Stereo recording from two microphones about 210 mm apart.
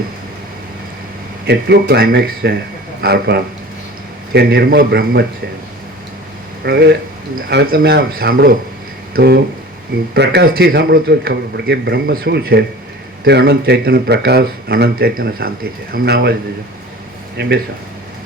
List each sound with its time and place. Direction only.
1.5 s speech: 50° right (ahead or behind)
6.7 s speech: 50° right (ahead or behind)
17.4 s speech: 50° right (ahead or behind)